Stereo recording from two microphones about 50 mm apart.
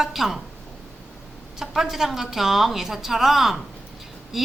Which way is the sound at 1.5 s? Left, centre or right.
Centre.